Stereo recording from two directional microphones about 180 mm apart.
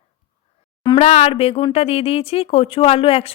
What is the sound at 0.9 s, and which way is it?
Speech, 35° left (ahead or behind).